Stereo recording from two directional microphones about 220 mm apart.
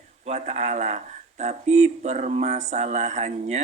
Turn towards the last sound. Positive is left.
turn(degrees=-30)  # may be behind; listen again after turning